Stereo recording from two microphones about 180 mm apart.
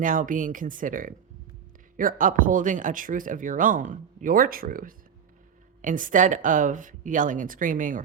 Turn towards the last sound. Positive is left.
turn(degrees=-45)  # may be behind; listen again after turning